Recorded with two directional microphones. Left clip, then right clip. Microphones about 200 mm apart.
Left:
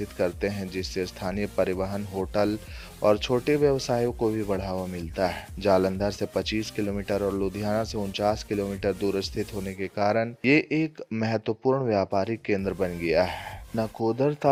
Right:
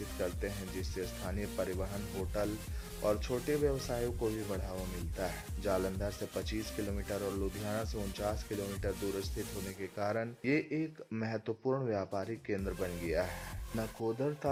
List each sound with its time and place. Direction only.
0.2 s speech: 40° left (ahead or behind)
3.0 s speech: 40° left (ahead or behind)